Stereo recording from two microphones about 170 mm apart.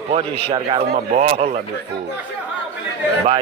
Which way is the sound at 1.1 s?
45° right (ahead or behind).